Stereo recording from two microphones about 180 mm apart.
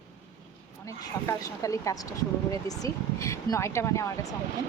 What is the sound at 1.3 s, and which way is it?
Speech, 15° left (ahead or behind).